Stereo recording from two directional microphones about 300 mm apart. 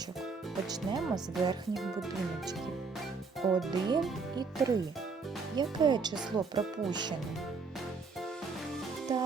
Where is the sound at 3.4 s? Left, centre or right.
Centre.